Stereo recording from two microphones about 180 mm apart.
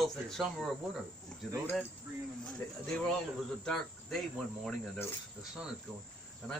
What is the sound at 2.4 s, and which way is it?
Speech, 5° left (ahead or behind).